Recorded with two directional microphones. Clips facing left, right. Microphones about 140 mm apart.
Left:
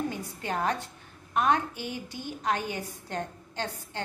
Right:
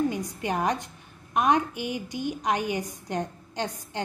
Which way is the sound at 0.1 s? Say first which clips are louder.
Right 4 dB; 15° right (ahead or behind).